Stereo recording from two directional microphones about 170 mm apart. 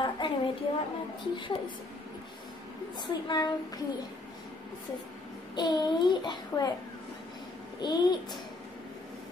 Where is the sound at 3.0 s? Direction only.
25° left (ahead or behind).